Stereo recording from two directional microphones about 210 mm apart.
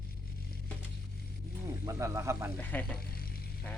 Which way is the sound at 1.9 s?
15° right (ahead or behind).